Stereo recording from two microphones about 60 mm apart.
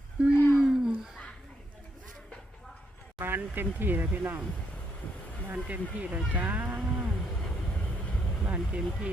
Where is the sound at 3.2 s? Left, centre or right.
Right.